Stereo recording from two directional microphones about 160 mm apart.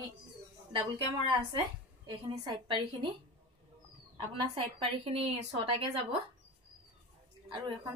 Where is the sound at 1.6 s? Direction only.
30° right (ahead or behind).